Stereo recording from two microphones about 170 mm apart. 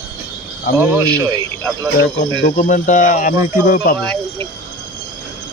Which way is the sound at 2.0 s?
55° left (ahead or behind).